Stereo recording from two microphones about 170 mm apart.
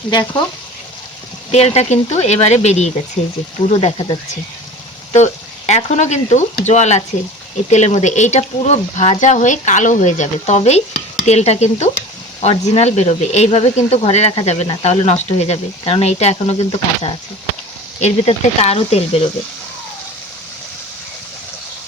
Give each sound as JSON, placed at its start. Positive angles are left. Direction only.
{"t": 0.1, "sound": "speech", "side_deg": 25}
{"t": 1.5, "sound": "speech", "side_deg": 40}